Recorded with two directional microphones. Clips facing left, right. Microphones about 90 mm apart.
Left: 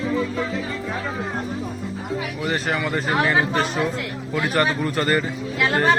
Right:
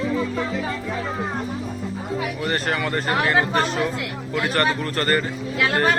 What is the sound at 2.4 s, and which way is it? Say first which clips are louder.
Speech: left 1 dB; 5° left (ahead or behind).